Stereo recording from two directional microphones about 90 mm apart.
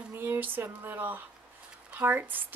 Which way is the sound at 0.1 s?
20° right (ahead or behind).